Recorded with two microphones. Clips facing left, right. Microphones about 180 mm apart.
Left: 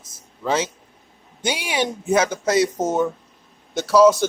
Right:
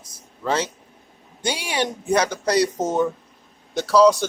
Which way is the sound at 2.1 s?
5° left (ahead or behind).